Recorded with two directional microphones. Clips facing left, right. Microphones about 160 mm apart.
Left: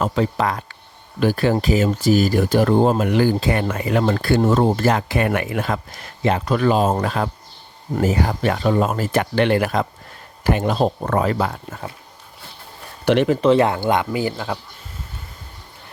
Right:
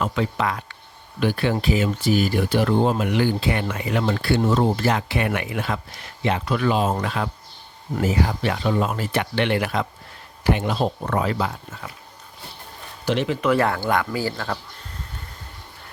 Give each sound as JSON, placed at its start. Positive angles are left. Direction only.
{"t": 0.0, "sound": "speech", "side_deg": 40}
{"t": 13.1, "sound": "speech", "side_deg": 65}
{"t": 13.4, "sound": "speech", "side_deg": 25}